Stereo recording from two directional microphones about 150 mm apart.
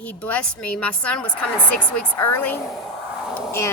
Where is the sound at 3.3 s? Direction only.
15° left (ahead or behind).